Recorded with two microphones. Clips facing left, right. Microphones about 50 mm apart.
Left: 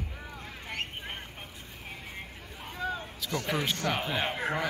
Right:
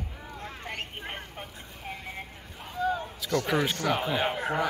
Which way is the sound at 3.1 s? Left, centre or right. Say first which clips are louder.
Right 4 dB; centre.